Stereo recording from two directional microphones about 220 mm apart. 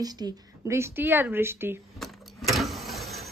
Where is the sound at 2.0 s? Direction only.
Centre (ahead or behind).